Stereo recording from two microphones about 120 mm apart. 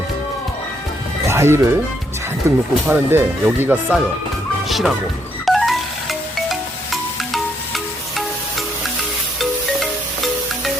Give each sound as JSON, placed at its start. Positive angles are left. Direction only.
{"t": 1.3, "sound": "speech", "side_deg": -20}
{"t": 4.7, "sound": "speech", "side_deg": 0}
{"t": 5.5, "sound": "music", "side_deg": 0}